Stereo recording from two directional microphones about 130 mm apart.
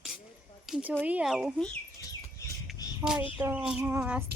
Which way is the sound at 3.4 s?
15° right (ahead or behind).